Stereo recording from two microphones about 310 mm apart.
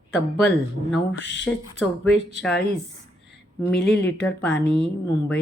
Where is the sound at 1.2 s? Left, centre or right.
Left.